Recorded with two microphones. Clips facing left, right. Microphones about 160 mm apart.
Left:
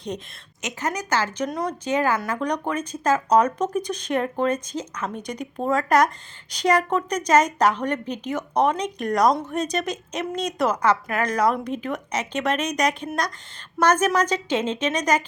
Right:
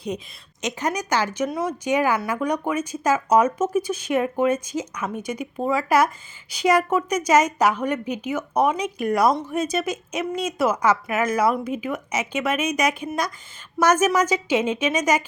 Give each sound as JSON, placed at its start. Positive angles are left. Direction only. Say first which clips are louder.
{"t": 0.6, "sound": "a woman's voice", "louder": "right 2 dB", "side_deg": -15}